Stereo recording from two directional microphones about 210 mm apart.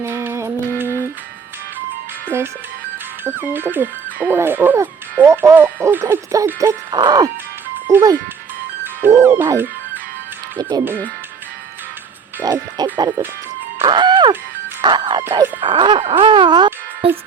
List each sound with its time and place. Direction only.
0.0 s music: 10° right (ahead or behind)
0.9 s music: 10° left (ahead or behind)
2.3 s speech: 10° right (ahead or behind)
12.4 s speech: 20° right (ahead or behind)